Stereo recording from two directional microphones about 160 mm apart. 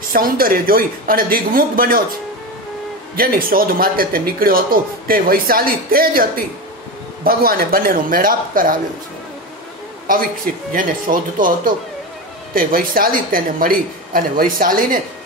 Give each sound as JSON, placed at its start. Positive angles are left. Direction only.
{"t": 0.1, "sound": "a man's voice", "side_deg": -65}
{"t": 3.2, "sound": "a man's voice", "side_deg": -65}
{"t": 10.0, "sound": "a man's voice", "side_deg": -65}